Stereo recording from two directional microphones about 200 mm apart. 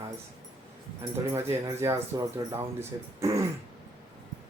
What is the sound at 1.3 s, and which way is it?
Speech, 15° right (ahead or behind).